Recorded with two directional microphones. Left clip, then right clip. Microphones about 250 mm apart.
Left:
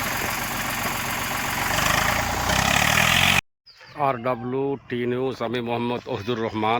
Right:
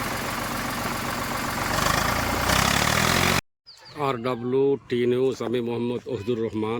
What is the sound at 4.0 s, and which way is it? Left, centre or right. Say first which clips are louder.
Speech: left 3 dB; centre.